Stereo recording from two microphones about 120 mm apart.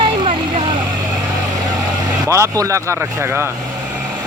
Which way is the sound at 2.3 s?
25° right (ahead or behind).